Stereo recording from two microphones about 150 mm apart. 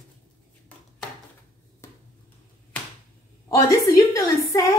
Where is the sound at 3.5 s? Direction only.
20° left (ahead or behind).